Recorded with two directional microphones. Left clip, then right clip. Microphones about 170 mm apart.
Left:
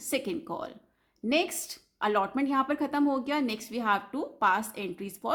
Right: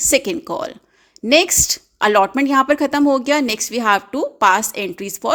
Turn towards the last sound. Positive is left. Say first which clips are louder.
# right 13 dB
turn(degrees=-40)  # may be behind; listen again after turning